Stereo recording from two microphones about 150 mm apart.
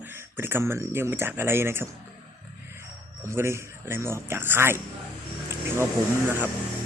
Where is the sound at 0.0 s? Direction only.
15° right (ahead or behind).